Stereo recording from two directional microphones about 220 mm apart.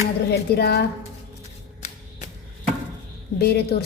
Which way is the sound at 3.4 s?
45° left (ahead or behind).